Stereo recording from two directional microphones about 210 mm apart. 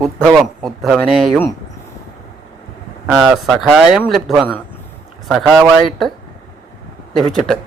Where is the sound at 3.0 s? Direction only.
5° right (ahead or behind).